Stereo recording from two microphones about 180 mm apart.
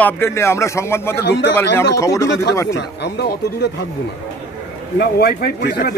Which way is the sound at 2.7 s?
70° left (ahead or behind).